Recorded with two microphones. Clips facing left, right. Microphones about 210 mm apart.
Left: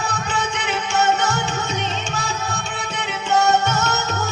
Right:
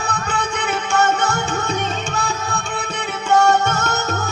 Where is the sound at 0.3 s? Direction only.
55° right (ahead or behind).